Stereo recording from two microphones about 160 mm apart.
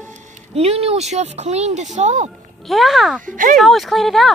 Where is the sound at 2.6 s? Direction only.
Centre (ahead or behind).